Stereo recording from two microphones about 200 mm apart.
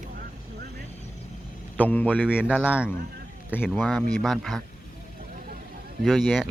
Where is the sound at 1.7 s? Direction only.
10° left (ahead or behind).